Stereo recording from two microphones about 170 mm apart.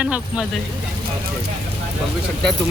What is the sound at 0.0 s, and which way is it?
Speech, 5° right (ahead or behind).